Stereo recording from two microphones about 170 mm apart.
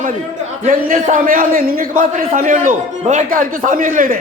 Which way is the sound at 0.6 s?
50° right (ahead or behind).